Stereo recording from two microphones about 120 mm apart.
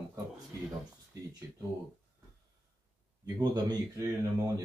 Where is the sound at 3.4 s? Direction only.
35° right (ahead or behind).